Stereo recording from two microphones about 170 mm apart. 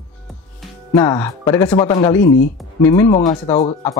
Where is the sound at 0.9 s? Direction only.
20° left (ahead or behind).